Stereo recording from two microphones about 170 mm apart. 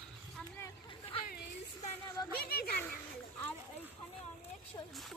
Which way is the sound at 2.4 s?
65° left (ahead or behind).